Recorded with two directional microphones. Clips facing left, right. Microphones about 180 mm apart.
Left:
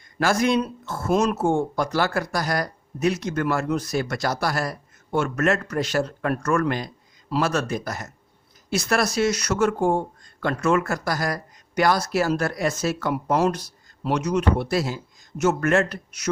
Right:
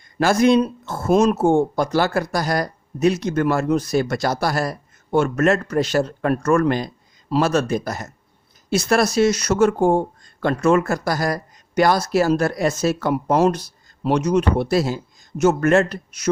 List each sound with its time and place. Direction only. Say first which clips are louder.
0.2 s speech: right 5 dB; 25° right (ahead or behind)